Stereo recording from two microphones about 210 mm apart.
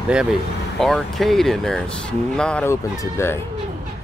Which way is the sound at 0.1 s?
5° right (ahead or behind).